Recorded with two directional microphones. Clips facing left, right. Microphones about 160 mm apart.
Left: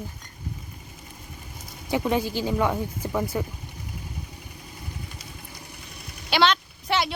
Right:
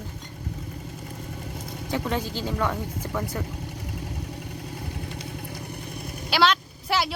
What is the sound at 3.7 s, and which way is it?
Vehicle, 75° right (ahead or behind).